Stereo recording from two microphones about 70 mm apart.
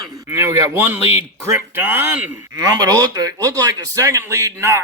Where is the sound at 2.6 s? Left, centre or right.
Right.